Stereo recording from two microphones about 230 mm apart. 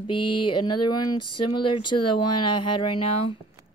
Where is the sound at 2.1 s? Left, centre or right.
Left.